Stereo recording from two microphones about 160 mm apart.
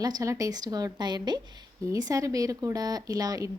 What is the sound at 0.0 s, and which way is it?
A woman's voice, 20° right (ahead or behind).